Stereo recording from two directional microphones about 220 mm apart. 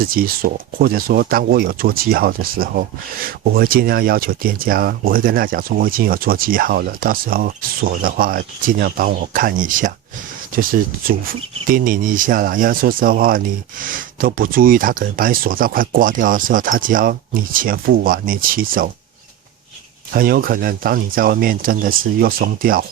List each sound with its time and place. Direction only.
0.0 s speech: 40° right (ahead or behind)
20.1 s speech: 40° right (ahead or behind)